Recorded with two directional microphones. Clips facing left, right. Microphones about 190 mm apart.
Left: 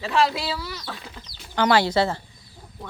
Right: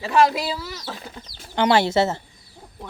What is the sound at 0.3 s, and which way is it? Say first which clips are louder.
Speech: right 2 dB; 40° right (ahead or behind).